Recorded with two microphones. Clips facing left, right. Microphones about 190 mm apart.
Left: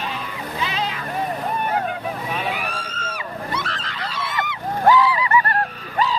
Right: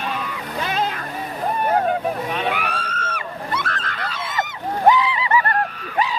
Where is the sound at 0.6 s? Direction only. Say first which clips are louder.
Right 3 dB; 50° right (ahead or behind).